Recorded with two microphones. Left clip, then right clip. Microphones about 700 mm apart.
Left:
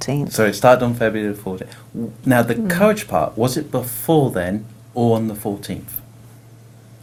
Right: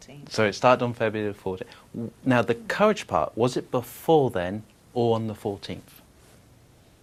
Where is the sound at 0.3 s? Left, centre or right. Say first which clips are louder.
Left 7 dB; right.